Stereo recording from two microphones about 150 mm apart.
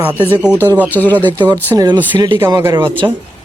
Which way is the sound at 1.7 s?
25° right (ahead or behind).